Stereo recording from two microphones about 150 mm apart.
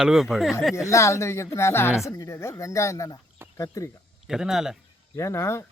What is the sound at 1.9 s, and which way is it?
Speech, 5° right (ahead or behind).